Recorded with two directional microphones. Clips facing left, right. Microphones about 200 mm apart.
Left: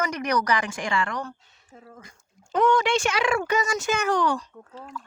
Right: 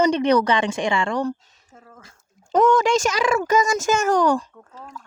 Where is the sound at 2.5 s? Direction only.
45° right (ahead or behind).